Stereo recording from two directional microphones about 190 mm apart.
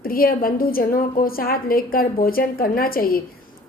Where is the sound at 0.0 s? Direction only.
50° left (ahead or behind).